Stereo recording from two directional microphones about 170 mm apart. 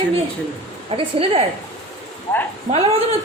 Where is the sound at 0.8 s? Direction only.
35° right (ahead or behind).